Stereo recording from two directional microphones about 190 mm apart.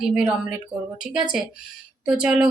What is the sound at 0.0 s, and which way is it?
Speech, 5° right (ahead or behind).